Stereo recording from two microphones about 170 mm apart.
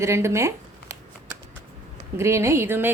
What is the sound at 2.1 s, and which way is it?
Speech, 15° right (ahead or behind).